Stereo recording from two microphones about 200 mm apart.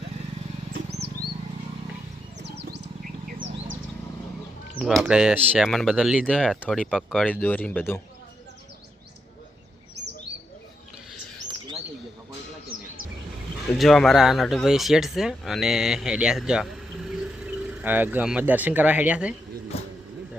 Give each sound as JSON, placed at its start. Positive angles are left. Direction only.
{"t": 2.4, "sound": "bird", "side_deg": -55}
{"t": 4.8, "sound": "speech", "side_deg": 0}
{"t": 13.7, "sound": "speech", "side_deg": 0}
{"t": 19.7, "sound": "vehicle", "side_deg": 30}